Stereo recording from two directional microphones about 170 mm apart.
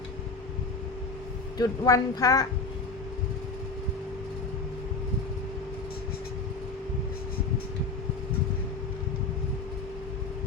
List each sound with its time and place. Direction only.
1.5 s speech: 20° left (ahead or behind)